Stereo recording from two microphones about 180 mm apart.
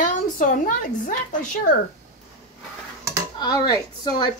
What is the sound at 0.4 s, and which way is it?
Speech, 50° left (ahead or behind).